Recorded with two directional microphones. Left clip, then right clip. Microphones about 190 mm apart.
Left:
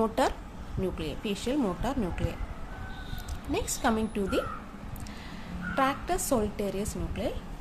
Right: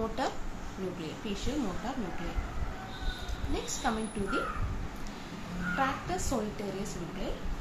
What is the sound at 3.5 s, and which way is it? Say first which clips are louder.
Speech: left 5 dB; 65° left (ahead or behind).